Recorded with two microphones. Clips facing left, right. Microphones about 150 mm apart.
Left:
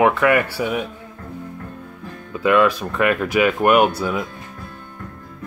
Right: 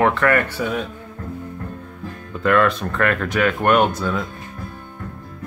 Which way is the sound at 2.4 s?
10° left (ahead or behind).